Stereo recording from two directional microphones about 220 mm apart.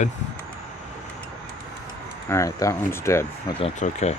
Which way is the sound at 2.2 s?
15° left (ahead or behind).